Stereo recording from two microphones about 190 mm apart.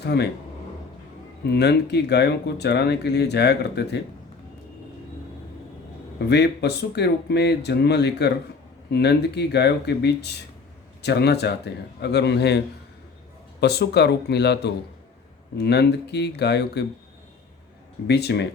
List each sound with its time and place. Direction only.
0.0 s speech: 60° left (ahead or behind)
1.5 s speech: 60° left (ahead or behind)
6.1 s speech: 60° left (ahead or behind)
18.1 s speech: 60° left (ahead or behind)